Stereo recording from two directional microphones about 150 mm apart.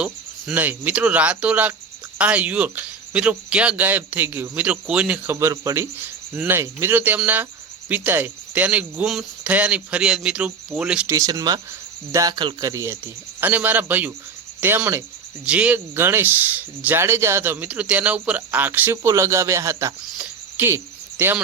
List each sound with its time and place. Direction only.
0.0 s speech: 10° right (ahead or behind)
11.1 s speech: 20° right (ahead or behind)
20.1 s cricket: 10° right (ahead or behind)